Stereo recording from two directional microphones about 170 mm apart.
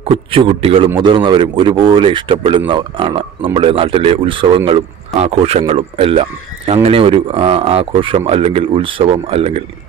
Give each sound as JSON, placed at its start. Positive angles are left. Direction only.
{"t": 0.1, "sound": "speech", "side_deg": -30}